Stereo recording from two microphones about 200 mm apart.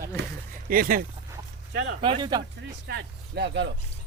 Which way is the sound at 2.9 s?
60° right (ahead or behind).